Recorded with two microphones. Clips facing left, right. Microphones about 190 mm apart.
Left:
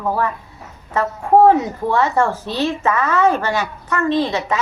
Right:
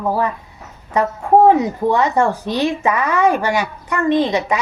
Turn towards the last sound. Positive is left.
turn(degrees=-15)  # may be behind; listen again after turning